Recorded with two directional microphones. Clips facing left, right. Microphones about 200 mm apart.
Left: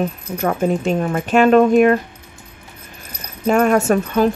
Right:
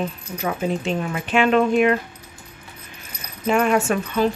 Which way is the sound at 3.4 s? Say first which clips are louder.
Left 4 dB; 45° left (ahead or behind).